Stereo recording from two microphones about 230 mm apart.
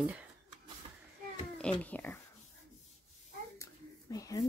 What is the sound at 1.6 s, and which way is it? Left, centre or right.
Speech, centre.